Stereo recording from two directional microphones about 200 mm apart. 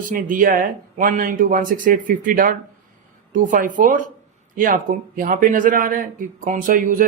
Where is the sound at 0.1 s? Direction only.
45° right (ahead or behind).